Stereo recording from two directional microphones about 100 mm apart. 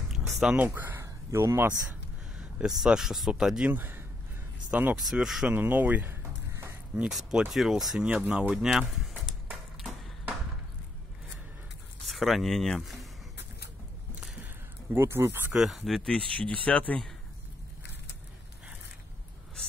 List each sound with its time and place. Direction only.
0.1 s a sound: 5° right (ahead or behind)
0.6 s speech: 20° right (ahead or behind)
1.0 s a sound: 25° right (ahead or behind)
2.3 s speech: 5° right (ahead or behind)
4.9 s speech: 5° right (ahead or behind)
5.5 s speech: 20° right (ahead or behind)
7.1 s speech: centre (ahead or behind)
12.1 s speech: centre (ahead or behind)
14.4 s a sound: 20° right (ahead or behind)
15.5 s speech: centre (ahead or behind)
16.3 s speech: 15° left (ahead or behind)